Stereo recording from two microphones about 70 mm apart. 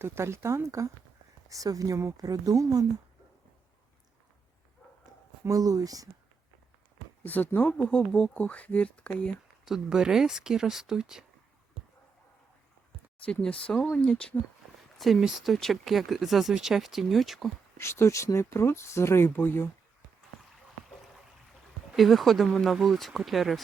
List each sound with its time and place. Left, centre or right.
0.0 s speech: right
1.5 s speech: right
5.5 s speech: right
7.3 s speech: left
9.6 s speech: centre
13.4 s speech: centre
14.9 s speech: centre
17.7 s speech: left
21.9 s speech: centre